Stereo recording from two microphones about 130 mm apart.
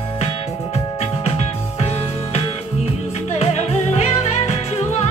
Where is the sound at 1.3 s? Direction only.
50° left (ahead or behind).